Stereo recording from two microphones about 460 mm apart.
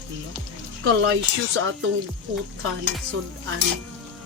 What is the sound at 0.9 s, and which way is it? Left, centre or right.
Speech, right.